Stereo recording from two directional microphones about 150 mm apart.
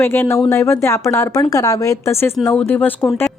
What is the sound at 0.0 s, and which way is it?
A woman's voice, 15° left (ahead or behind).